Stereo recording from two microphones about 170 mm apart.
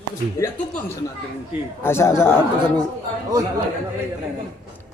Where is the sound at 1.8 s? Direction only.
15° left (ahead or behind).